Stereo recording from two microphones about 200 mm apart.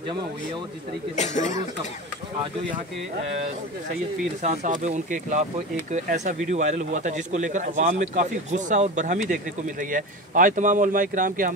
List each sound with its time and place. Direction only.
1.1 s speech: 35° left (ahead or behind)
4.4 s speech: 35° right (ahead or behind)